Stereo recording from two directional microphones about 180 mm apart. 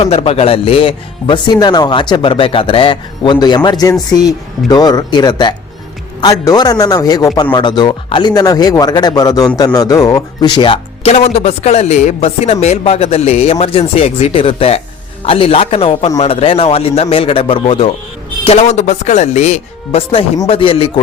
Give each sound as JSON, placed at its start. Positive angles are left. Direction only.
{"t": 0.0, "sound": "speech", "side_deg": 35}